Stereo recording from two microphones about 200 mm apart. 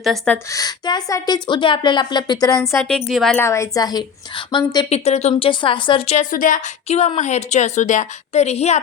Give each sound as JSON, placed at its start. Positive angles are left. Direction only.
{"t": 0.0, "sound": "a woman's voice", "side_deg": 0}
{"t": 0.5, "sound": "a woman's voice", "side_deg": 20}
{"t": 2.8, "sound": "a woman's voice", "side_deg": 0}
{"t": 3.4, "sound": "a woman's voice", "side_deg": 15}